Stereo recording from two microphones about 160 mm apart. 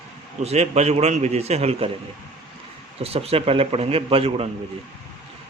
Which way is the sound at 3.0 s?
40° right (ahead or behind).